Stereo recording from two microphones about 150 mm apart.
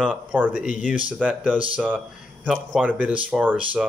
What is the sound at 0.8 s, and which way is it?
Speech, 55° left (ahead or behind).